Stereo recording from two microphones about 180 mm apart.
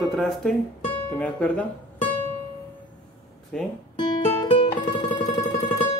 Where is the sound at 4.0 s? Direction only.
30° left (ahead or behind).